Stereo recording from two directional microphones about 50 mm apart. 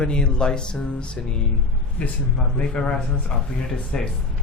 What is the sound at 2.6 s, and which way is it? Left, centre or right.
Speech, left.